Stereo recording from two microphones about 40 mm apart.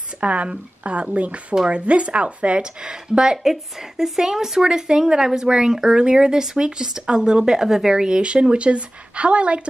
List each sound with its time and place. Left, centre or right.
0.2 s speech: right
3.4 s speech: centre; by 9.6 s right